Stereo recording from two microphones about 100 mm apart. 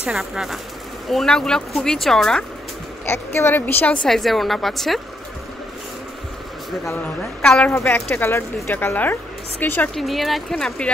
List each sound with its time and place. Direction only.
0.0 s a woman's voice: 5° right (ahead or behind)
3.1 s a woman's voice: 25° left (ahead or behind); by 5.0 s centre (ahead or behind)
6.9 s a woman's voice: 15° left (ahead or behind)
7.7 s speech: 25° left (ahead or behind)
9.9 s a woman's voice: centre (ahead or behind)